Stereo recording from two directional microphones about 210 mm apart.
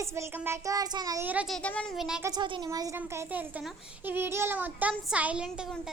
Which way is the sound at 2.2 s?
20° right (ahead or behind).